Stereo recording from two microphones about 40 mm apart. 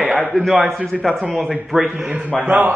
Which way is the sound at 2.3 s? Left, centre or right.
Centre.